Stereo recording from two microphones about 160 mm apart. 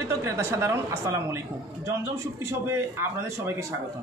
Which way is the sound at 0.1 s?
15° right (ahead or behind).